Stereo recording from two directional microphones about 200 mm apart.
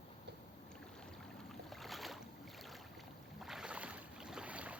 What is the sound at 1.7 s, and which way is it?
Boat, centre (ahead or behind).